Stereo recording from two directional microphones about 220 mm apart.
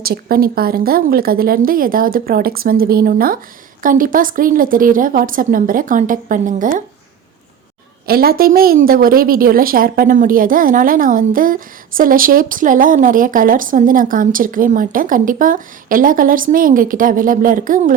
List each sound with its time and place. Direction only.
0.0 s speech: 45° right (ahead or behind)
8.0 s speech: 45° right (ahead or behind)